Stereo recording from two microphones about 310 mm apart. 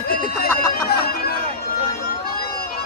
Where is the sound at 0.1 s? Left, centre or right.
Left.